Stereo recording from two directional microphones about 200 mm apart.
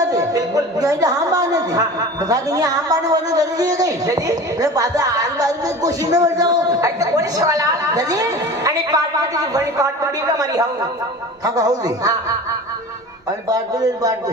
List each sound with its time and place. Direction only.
0.1 s a woman's voice: 15° right (ahead or behind)